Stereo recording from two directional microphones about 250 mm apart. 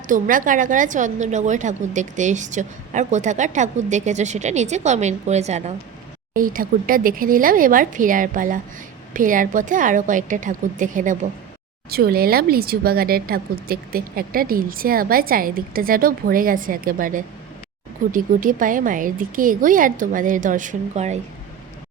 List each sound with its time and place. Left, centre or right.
0.1 s a woman's voice: right